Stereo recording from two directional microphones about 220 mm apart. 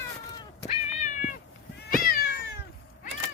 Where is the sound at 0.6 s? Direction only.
30° left (ahead or behind).